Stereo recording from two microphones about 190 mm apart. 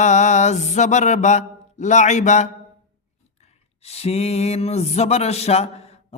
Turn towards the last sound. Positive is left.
turn(degrees=35)  # may be behind; listen again after turning